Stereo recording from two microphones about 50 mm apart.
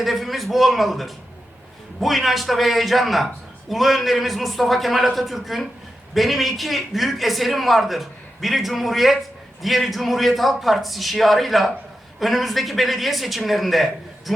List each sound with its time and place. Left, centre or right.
0.0 s a man's voice: centre